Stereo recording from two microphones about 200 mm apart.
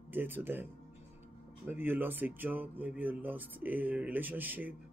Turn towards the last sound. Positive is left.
turn(degrees=-10)  # may be behind; listen again after turning